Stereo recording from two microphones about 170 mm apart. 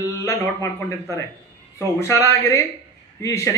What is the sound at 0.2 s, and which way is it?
A man's voice, 20° left (ahead or behind).